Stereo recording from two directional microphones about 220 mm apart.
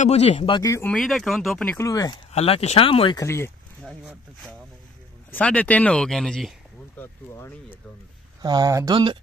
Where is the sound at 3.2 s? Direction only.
10° left (ahead or behind).